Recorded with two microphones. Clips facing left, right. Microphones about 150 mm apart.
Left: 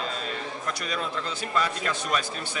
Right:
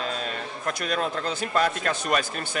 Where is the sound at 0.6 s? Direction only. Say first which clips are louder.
Right 6 dB; 55° right (ahead or behind).